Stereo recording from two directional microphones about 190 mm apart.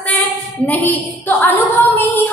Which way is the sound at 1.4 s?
10° left (ahead or behind).